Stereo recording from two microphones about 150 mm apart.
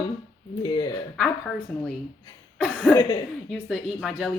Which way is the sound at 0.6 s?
30° left (ahead or behind).